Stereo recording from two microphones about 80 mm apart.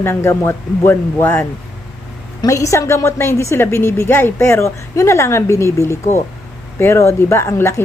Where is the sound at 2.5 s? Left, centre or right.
Left.